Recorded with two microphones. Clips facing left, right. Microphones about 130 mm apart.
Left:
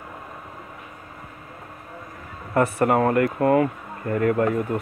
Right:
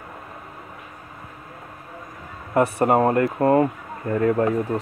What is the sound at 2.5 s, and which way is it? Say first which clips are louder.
Speech: right 1 dB; 25° right (ahead or behind).